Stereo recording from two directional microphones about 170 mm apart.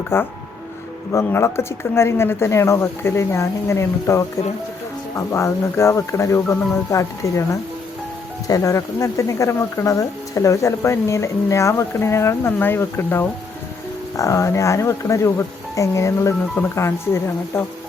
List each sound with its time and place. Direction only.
0.1 s speech: 15° left (ahead or behind)